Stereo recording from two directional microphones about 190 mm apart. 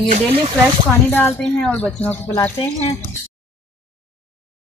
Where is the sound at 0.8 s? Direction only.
10° left (ahead or behind).